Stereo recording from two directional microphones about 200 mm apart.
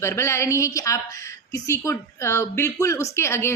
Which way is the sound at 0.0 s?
15° left (ahead or behind).